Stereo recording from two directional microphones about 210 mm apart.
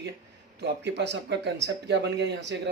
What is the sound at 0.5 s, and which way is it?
Speech, 55° right (ahead or behind).